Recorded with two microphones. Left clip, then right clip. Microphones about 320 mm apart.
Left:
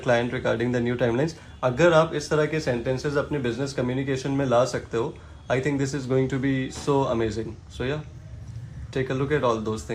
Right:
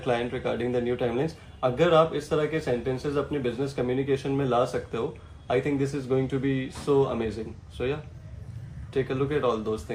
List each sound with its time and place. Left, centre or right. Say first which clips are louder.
0.0 s speech: left 4 dB; left